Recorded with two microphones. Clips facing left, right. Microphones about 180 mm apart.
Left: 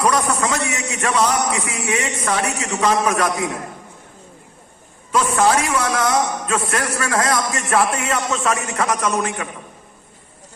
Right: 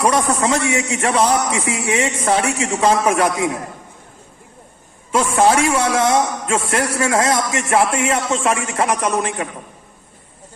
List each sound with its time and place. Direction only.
0.0 s a man's voice: 25° right (ahead or behind)
5.1 s a man's voice: 25° right (ahead or behind)